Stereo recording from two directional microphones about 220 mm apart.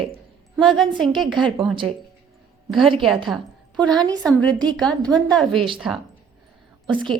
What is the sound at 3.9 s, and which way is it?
Speech, 20° right (ahead or behind).